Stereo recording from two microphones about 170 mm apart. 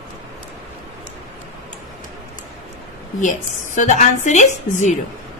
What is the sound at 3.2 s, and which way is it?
A woman's voice, 45° left (ahead or behind).